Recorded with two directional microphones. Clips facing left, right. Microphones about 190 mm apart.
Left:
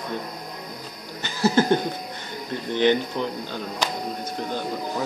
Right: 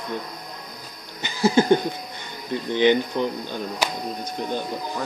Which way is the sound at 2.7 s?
15° right (ahead or behind).